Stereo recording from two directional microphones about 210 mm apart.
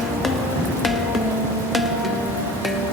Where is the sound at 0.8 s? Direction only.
Centre (ahead or behind).